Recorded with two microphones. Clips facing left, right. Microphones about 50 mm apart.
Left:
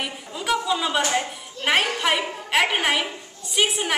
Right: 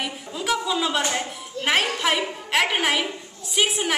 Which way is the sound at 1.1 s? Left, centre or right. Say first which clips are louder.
Left 2 dB; centre.